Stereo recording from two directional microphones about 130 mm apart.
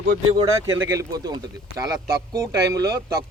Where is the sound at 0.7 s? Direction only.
20° right (ahead or behind).